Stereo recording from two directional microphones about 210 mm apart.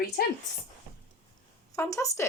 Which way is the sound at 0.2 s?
50° left (ahead or behind).